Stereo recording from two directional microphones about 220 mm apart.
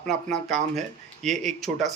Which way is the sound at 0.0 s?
Centre (ahead or behind).